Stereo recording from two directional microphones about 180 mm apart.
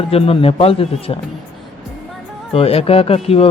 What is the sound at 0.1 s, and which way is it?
Speech, 30° left (ahead or behind).